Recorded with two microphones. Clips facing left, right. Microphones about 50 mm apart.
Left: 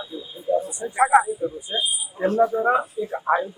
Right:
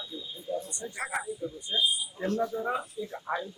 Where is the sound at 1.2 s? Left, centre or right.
Left.